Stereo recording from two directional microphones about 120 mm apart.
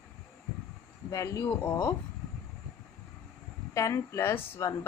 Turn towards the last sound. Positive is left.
turn(degrees=20)  # may be behind; listen again after turning